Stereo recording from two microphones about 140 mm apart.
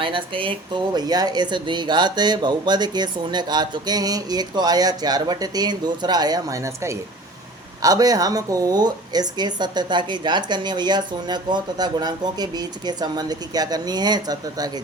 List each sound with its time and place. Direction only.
0.0 s speech: 35° right (ahead or behind)